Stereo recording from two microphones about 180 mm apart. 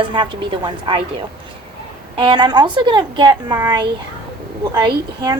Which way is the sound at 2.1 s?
25° right (ahead or behind).